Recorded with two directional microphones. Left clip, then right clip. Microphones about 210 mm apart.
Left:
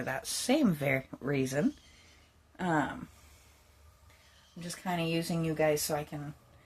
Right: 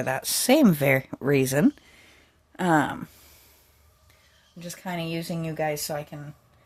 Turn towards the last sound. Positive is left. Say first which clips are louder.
# right 1 dB
turn(degrees=-40)  # may be behind; listen again after turning